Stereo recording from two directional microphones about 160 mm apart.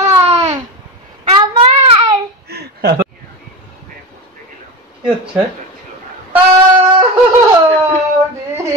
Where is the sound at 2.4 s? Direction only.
90° right.